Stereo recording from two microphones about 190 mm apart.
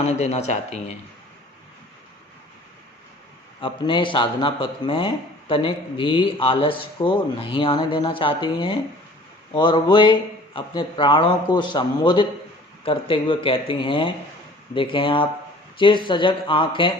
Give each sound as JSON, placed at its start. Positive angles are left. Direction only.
{"t": 0.0, "sound": "speech", "side_deg": 35}
{"t": 3.6, "sound": "speech", "side_deg": 25}